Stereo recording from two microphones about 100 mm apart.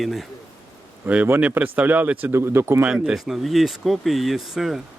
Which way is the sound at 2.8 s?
10° right (ahead or behind).